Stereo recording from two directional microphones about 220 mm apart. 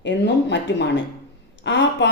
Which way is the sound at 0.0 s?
55° left (ahead or behind).